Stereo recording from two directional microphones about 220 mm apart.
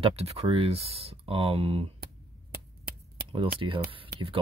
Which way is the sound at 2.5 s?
45° right (ahead or behind).